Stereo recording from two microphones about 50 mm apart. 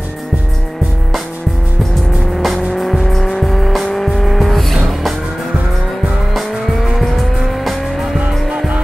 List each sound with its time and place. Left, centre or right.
2.3 s vehicle: centre
6.3 s vehicle: centre
8.5 s music: centre